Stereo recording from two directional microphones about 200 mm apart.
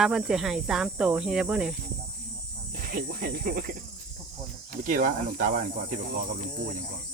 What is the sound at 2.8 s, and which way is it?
Cricket, 45° right (ahead or behind).